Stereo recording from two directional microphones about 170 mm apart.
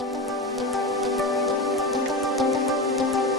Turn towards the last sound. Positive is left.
turn(degrees=0)  # may be behind; listen again after turning